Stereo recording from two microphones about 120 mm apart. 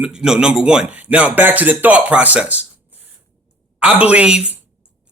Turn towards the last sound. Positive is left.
turn(degrees=-10)  # may be behind; listen again after turning